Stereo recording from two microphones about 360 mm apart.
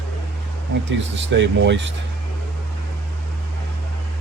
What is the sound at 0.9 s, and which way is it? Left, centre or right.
Speech, right.